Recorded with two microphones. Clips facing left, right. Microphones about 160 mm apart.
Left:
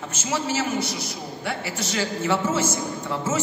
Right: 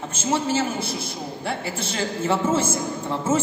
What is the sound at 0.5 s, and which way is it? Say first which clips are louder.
A man's voice: right 1 dB; 30° right (ahead or behind).